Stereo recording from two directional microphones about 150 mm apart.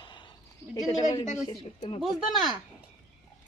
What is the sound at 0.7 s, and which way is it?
Speech, 25° left (ahead or behind).